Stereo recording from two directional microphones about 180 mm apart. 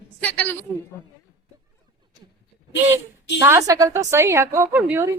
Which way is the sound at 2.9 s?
15° right (ahead or behind).